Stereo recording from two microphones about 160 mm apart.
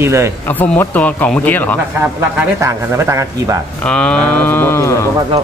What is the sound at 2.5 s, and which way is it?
Speech, 15° right (ahead or behind).